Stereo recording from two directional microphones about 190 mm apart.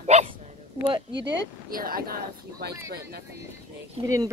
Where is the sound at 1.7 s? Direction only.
50° right (ahead or behind).